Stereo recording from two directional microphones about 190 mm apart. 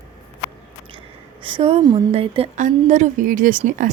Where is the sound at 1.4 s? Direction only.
25° right (ahead or behind).